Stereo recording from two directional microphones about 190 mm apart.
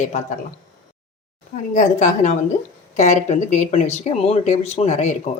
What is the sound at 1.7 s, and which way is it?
Speech, 40° left (ahead or behind).